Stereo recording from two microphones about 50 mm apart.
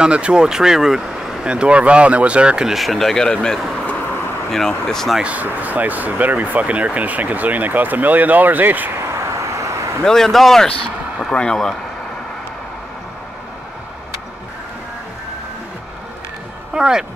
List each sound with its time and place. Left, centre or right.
0.0 s speech: centre
2.7 s speech: centre
5.2 s speech: right
8.9 s vehicle: right
10.0 s speech: centre
16.7 s speech: centre